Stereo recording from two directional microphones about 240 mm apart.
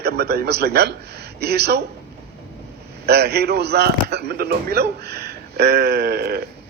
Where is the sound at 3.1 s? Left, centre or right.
Right.